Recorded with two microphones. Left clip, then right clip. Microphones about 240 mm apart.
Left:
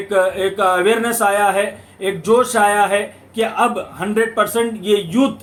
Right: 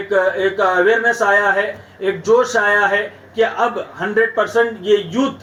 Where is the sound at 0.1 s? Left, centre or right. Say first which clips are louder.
Right 1 dB; left.